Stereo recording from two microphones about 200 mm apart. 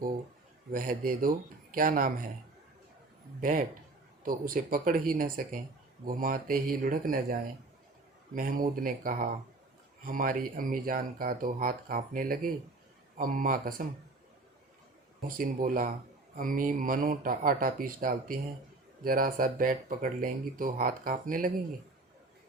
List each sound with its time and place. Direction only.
0.7 s speech: 45° right (ahead or behind)
4.2 s speech: 45° right (ahead or behind)
15.4 s speech: 40° right (ahead or behind)